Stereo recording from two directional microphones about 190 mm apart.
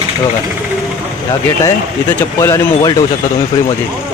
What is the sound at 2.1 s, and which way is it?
Speech, 15° left (ahead or behind).